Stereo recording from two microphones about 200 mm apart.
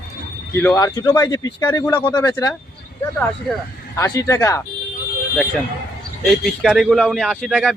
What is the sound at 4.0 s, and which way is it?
Speech, 15° left (ahead or behind).